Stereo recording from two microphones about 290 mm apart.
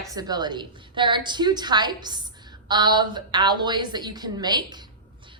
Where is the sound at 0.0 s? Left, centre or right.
Centre.